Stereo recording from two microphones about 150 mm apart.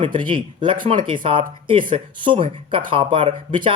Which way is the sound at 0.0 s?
35° right (ahead or behind).